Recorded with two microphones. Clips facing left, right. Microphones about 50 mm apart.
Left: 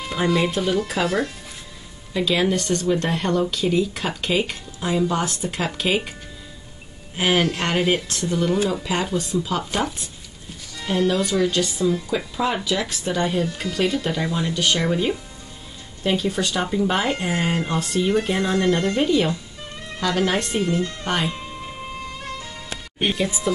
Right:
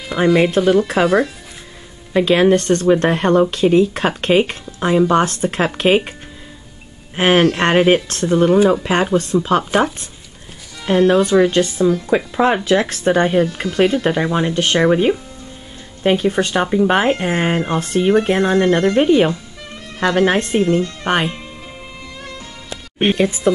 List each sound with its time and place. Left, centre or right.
0.2 s speech: right
0.6 s speech: right
2.1 s speech: right
7.2 s speech: right
10.9 s speech: right
22.9 s speech: right